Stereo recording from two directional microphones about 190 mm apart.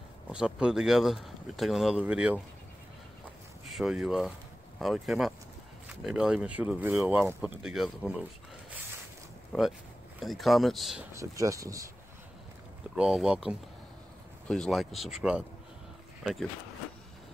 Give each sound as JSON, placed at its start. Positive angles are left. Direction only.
{"t": 0.3, "sound": "speech", "side_deg": -5}
{"t": 3.7, "sound": "speech", "side_deg": -5}
{"t": 9.5, "sound": "speech", "side_deg": 0}
{"t": 11.1, "sound": "speech", "side_deg": -15}
{"t": 12.9, "sound": "speech", "side_deg": -5}